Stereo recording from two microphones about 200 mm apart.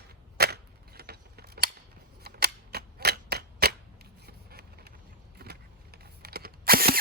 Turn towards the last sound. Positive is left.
turn(degrees=-50)  # may be behind; listen again after turning